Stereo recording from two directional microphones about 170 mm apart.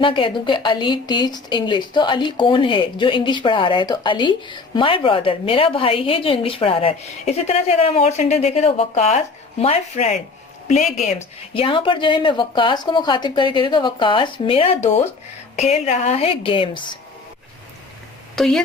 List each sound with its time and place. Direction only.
0.0 s a woman's voice: 30° left (ahead or behind)
18.3 s speech: 5° left (ahead or behind)